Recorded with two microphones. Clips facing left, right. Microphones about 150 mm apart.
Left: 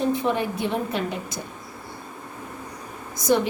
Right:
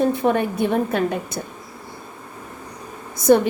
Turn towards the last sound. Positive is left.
turn(degrees=-55)  # may be behind; listen again after turning